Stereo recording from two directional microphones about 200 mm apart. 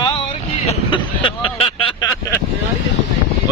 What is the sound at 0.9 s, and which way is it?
Vehicle, 25° left (ahead or behind).